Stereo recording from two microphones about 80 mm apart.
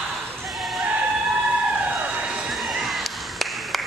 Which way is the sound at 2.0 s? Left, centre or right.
Centre.